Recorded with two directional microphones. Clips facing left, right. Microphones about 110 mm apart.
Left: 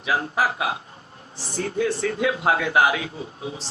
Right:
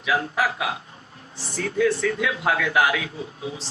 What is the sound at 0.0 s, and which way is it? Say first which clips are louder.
Speech: even; 35° left (ahead or behind).